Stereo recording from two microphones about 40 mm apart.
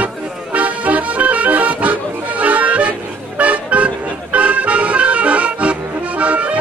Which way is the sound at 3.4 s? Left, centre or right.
Right.